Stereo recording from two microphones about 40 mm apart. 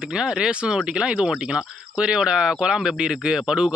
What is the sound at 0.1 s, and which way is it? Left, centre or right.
Speech, centre.